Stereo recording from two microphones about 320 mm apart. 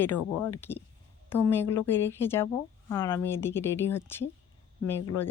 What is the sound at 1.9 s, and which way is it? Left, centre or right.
Speech, centre.